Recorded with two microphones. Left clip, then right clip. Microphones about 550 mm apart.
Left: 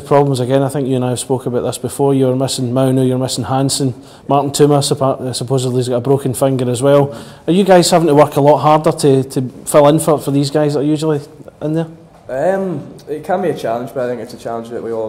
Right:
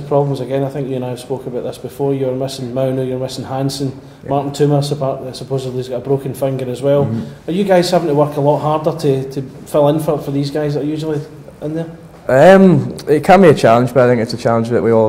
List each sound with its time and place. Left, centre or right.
0.1 s a man's voice: left
12.3 s speech: right